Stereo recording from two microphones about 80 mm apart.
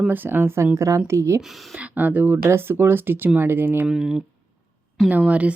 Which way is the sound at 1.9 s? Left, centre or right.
Right.